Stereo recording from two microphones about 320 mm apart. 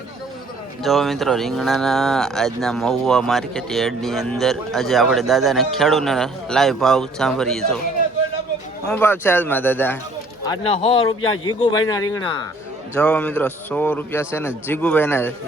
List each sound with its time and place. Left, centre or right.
0.8 s speech: centre
8.9 s a man's voice: centre